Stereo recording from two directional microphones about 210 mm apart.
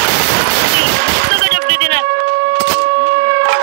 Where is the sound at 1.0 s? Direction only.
55° right (ahead or behind).